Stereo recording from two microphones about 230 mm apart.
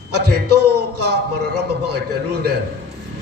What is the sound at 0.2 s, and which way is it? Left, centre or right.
Speech, right.